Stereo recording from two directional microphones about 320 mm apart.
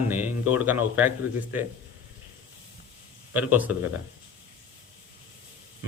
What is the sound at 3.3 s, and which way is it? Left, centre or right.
Speech, centre.